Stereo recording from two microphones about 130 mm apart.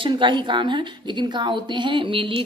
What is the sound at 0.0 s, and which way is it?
A woman's voice, 40° right (ahead or behind).